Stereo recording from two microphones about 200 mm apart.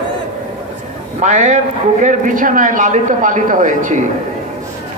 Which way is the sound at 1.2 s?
35° right (ahead or behind).